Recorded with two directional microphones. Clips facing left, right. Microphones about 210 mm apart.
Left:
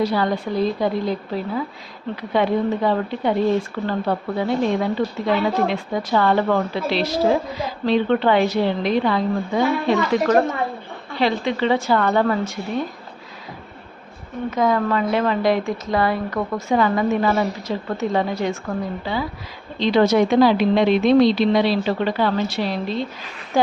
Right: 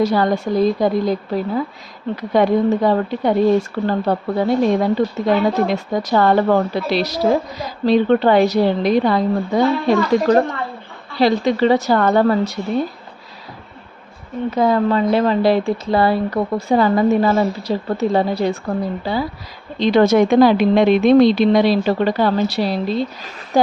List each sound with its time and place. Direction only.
0.0 s speech: 45° right (ahead or behind)
2.3 s a woman's voice: 40° right (ahead or behind)
14.5 s a woman's voice: 30° right (ahead or behind)
19.8 s speech: 50° right (ahead or behind)